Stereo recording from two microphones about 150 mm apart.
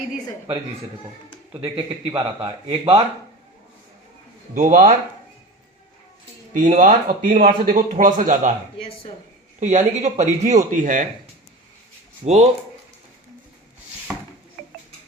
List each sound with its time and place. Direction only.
2.1 s speech: 35° right (ahead or behind)
4.5 s speech: 65° right (ahead or behind)
6.5 s speech: 60° right (ahead or behind)
9.6 s speech: 55° right (ahead or behind)
12.2 s speech: 45° right (ahead or behind)